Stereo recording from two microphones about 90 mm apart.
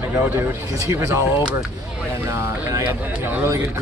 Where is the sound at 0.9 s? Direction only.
30° right (ahead or behind).